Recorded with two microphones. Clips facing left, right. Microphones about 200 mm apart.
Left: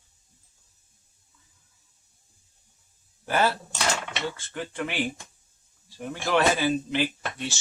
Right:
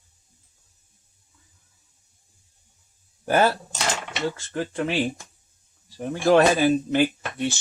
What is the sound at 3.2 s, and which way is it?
Speech, 45° right (ahead or behind).